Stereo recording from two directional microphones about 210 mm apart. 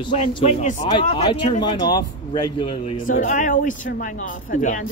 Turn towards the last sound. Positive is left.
turn(degrees=40)  # may be behind; listen again after turning